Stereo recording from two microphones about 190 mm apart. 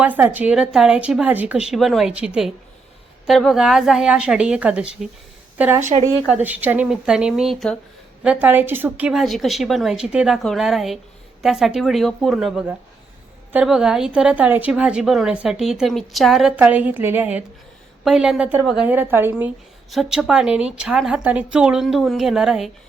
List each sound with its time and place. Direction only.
0.0 s a woman's voice: 10° right (ahead or behind)
5.8 s speech: 35° right (ahead or behind)
6.3 s a woman's voice: 10° right (ahead or behind)